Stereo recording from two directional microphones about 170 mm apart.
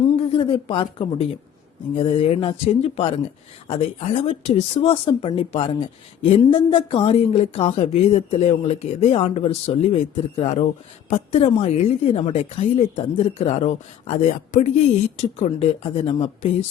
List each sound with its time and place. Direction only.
0.3 s speech: 30° left (ahead or behind)